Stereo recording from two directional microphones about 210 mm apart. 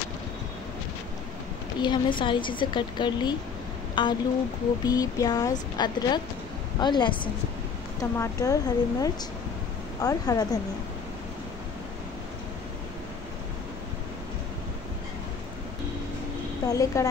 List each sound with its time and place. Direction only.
1.8 s a woman's voice: 20° left (ahead or behind)
16.6 s speech: 15° left (ahead or behind)